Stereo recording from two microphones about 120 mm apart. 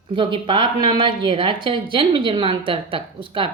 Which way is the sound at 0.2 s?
45° right (ahead or behind).